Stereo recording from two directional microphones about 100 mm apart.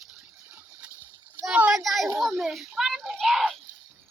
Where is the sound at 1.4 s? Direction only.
10° right (ahead or behind).